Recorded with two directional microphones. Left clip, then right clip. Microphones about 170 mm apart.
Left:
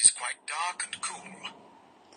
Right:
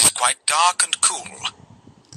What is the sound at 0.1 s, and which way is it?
Speech, 65° right (ahead or behind).